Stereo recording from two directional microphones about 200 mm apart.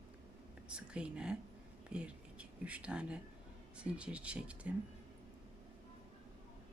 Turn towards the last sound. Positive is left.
turn(degrees=-5)  # may be behind; listen again after turning